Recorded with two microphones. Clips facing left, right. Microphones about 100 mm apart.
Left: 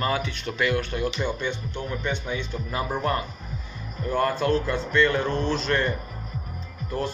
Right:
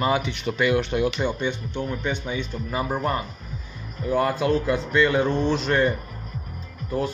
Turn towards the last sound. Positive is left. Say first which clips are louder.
# right 3 dB
turn(degrees=-5)  # may be behind; listen again after turning